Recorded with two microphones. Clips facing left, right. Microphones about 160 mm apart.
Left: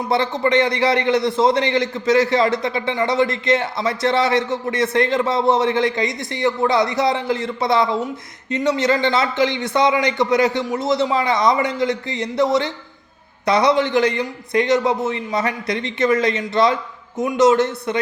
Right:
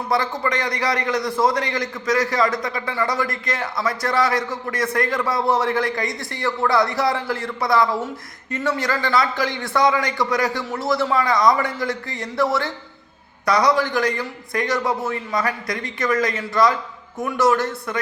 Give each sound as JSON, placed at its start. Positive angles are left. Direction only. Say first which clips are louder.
{"t": 0.1, "sound": "a man's voice", "louder": "left 4 dB", "side_deg": 25}